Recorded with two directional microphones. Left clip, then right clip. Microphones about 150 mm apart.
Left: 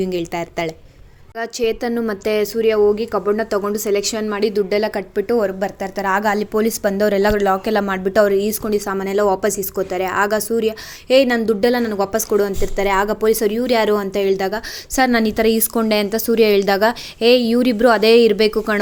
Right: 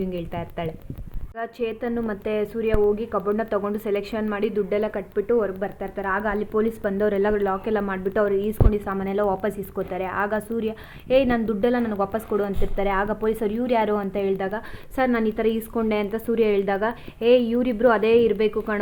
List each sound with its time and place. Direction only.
0.0 s a woman's voice: 35° left (ahead or behind)
8.7 s a woman's voice: 25° left (ahead or behind)
14.9 s a woman's voice: 40° left (ahead or behind)